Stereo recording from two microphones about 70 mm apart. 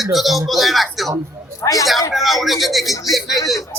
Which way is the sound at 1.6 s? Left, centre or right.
Left.